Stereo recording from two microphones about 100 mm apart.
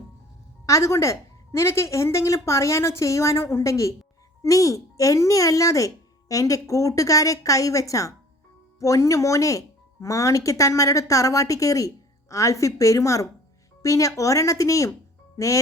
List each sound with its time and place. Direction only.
0.6 s a woman's voice: 30° left (ahead or behind)